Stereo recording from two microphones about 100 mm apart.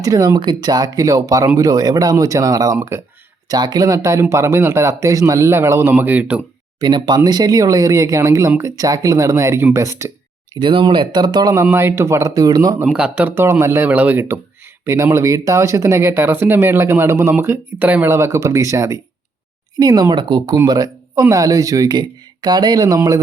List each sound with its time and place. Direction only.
0.0 s speech: 35° right (ahead or behind)
3.5 s speech: 45° right (ahead or behind)
5.9 s speech: 15° right (ahead or behind)
6.7 s speech: 45° right (ahead or behind); by 10.1 s 30° right (ahead or behind)
10.6 s speech: 55° right (ahead or behind)
11.6 s speech: 25° right (ahead or behind); by 12.8 s 40° right (ahead or behind)
12.8 s speech: 10° right (ahead or behind)
13.3 s speech: 25° right (ahead or behind)
18.1 s speech: 30° right (ahead or behind)
19.7 s speech: 40° right (ahead or behind)